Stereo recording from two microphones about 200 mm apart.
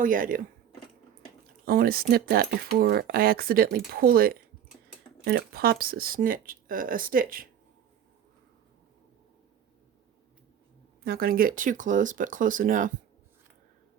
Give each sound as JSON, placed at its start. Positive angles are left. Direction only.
{"t": 0.0, "sound": "speech", "side_deg": -45}
{"t": 1.6, "sound": "speech", "side_deg": -45}
{"t": 11.0, "sound": "speech", "side_deg": -50}